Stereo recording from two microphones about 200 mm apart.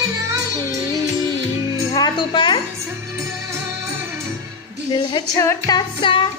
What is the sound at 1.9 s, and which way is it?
Music, 20° left (ahead or behind).